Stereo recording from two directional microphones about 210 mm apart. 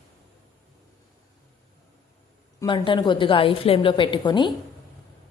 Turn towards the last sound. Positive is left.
turn(degrees=20)  # may be behind; listen again after turning